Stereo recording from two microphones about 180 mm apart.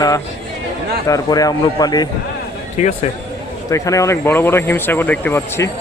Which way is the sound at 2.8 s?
40° left (ahead or behind).